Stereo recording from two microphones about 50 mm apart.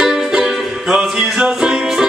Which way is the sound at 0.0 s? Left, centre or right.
Centre.